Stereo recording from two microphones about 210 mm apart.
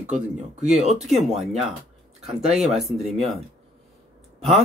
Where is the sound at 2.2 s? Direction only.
Centre (ahead or behind).